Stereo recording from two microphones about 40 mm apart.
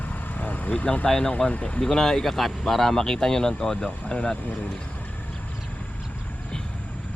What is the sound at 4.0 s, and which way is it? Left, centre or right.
Speech, left.